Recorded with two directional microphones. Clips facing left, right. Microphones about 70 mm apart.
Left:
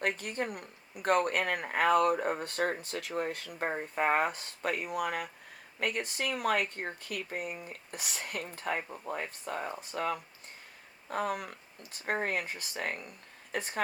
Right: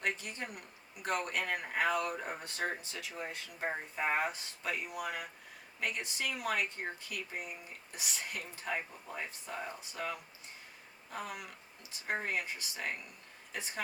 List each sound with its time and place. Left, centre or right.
0.0 s speech: left